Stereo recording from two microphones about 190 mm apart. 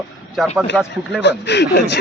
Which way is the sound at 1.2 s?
65° left (ahead or behind).